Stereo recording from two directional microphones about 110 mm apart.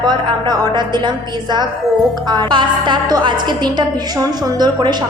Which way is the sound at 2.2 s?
45° right (ahead or behind).